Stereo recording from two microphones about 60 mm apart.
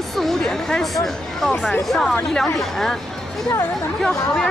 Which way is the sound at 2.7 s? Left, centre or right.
Centre.